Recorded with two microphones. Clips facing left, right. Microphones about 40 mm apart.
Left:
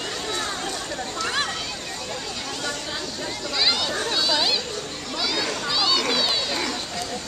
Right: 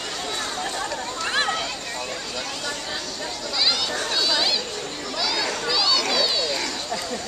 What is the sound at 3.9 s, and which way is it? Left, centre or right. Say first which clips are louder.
Chatter: even; centre.